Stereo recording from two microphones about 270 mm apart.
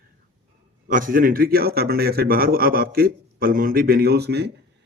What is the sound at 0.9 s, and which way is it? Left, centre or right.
Speech, right.